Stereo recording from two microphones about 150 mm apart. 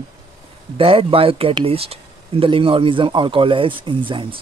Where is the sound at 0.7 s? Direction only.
40° right (ahead or behind).